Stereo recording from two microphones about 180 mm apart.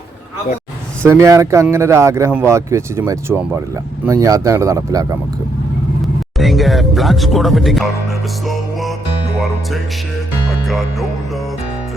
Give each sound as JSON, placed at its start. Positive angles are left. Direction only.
{"t": 1.0, "sound": "speech", "side_deg": -15}
{"t": 6.3, "sound": "speech", "side_deg": 0}